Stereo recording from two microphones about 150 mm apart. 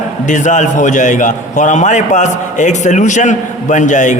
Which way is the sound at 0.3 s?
55° left (ahead or behind).